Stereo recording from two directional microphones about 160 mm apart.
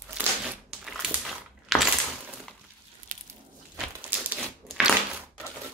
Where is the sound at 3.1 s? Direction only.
55° right (ahead or behind).